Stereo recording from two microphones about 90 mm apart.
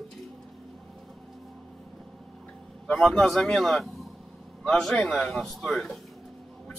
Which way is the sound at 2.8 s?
5° left (ahead or behind).